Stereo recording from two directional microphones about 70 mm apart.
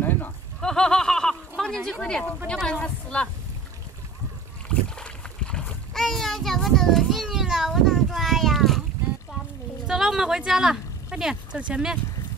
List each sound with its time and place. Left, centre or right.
0.6 s a sound: centre
1.9 s speech: centre
4.6 s boat: centre
5.9 s a child's voice: centre
9.8 s speech: centre
11.1 s a sound: centre
11.5 s speech: centre